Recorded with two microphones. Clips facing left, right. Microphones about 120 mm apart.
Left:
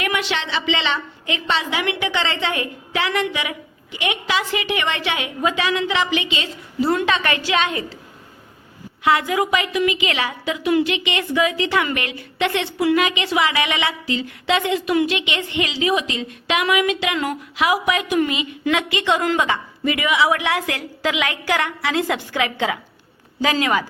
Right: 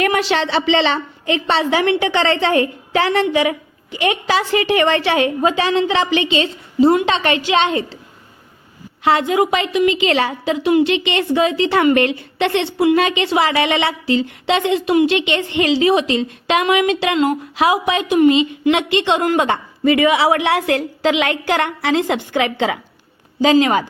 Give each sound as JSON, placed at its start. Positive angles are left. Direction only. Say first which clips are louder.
{"t": 0.0, "sound": "a woman's voice", "louder": "right 7 dB", "side_deg": -35}
{"t": 9.0, "sound": "a woman's voice", "louder": "right 3 dB", "side_deg": -25}
{"t": 19.5, "sound": "a woman's voice", "louder": "right 6 dB", "side_deg": -35}